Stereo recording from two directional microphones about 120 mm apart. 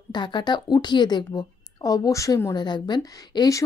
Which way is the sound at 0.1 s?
40° left (ahead or behind).